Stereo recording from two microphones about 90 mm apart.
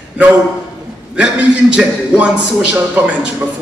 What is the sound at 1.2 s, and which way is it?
A man's voice, 10° right (ahead or behind).